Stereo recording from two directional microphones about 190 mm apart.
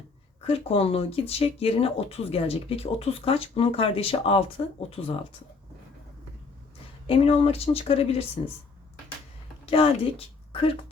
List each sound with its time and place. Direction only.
0.4 s speech: 30° left (ahead or behind)
7.1 s speech: 30° left (ahead or behind)
9.6 s speech: 30° left (ahead or behind)